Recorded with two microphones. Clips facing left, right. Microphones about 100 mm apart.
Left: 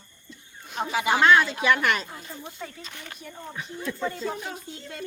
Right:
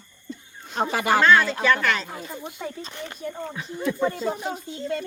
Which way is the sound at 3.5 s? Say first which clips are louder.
Right 3 dB; 10° right (ahead or behind).